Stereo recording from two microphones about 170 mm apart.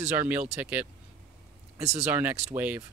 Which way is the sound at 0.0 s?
10° right (ahead or behind).